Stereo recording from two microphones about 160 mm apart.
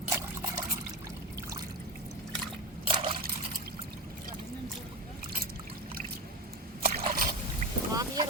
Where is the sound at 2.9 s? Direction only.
30° right (ahead or behind).